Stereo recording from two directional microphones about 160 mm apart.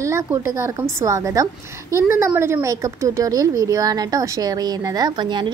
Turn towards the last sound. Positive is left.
turn(degrees=-30)  # may be behind; listen again after turning